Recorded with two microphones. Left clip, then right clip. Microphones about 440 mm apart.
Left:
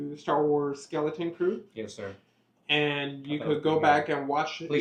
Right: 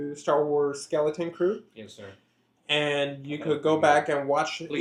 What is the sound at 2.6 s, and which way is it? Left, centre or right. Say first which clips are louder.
Speech: right 2 dB; right.